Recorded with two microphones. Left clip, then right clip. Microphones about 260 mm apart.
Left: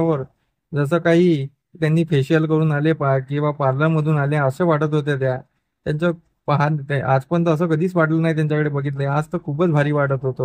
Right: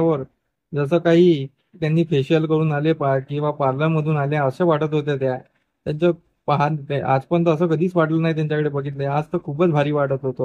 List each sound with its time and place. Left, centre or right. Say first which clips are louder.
0.7 s speech: right 1 dB; left